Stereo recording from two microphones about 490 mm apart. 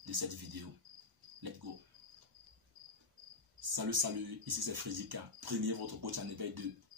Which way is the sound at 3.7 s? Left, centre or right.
Right.